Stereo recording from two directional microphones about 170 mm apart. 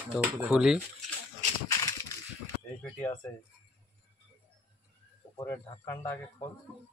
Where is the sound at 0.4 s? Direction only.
5° right (ahead or behind).